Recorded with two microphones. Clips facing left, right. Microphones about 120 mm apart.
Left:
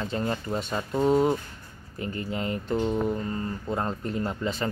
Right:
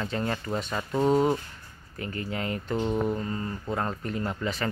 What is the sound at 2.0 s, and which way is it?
Speech, 30° left (ahead or behind).